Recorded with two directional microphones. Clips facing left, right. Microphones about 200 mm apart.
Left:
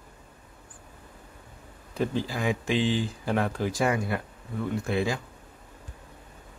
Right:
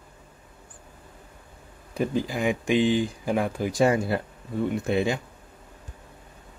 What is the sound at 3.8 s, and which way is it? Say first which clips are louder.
Speech: right 6 dB; 30° right (ahead or behind).